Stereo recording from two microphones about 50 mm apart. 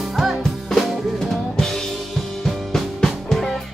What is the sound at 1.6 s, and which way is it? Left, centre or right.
Drum kit, centre.